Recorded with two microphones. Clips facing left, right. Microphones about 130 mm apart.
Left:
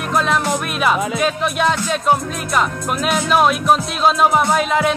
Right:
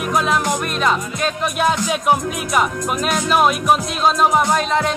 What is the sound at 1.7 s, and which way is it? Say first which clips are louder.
Music: even; 10° right (ahead or behind).